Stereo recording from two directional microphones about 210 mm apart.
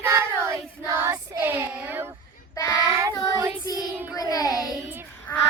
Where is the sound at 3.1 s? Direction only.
20° left (ahead or behind).